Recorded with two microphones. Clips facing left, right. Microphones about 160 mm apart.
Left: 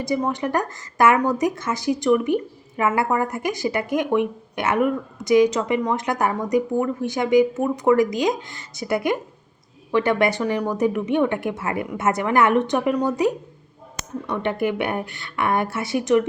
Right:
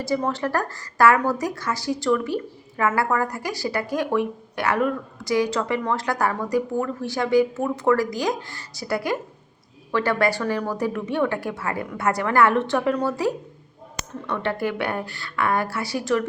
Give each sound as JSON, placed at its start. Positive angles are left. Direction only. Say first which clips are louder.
{"t": 0.0, "sound": "a woman's voice", "louder": "left 1 dB", "side_deg": 15}